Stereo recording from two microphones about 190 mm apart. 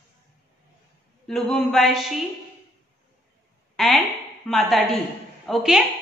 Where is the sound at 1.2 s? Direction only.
Centre (ahead or behind).